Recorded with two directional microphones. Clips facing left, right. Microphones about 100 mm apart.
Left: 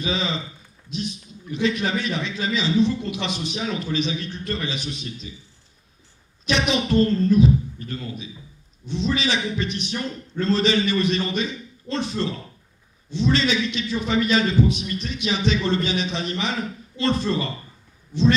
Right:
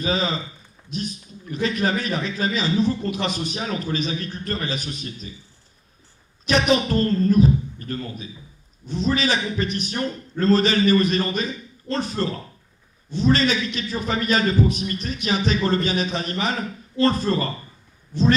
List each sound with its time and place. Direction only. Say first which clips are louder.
0.0 s speech: right 2 dB; 40° right (ahead or behind)
6.5 s speech: right 2 dB; 45° right (ahead or behind)